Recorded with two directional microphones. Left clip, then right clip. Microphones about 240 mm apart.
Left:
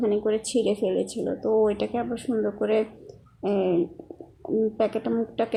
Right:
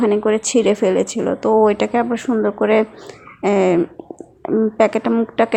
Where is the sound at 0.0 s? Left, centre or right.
Right.